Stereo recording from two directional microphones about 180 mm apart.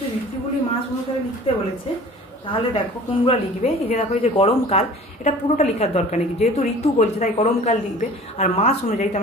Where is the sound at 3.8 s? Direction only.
35° left (ahead or behind).